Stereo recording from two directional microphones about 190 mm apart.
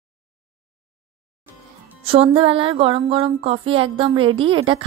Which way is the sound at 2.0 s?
30° right (ahead or behind).